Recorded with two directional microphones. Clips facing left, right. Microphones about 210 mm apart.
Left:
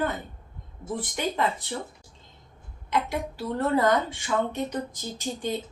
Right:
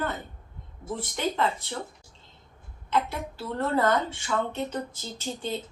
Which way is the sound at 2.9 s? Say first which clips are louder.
Left 1 dB; 15° left (ahead or behind).